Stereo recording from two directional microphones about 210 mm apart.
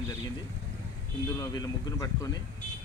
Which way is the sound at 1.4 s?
15° left (ahead or behind).